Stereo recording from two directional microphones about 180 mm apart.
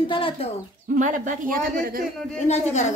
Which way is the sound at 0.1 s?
30° left (ahead or behind).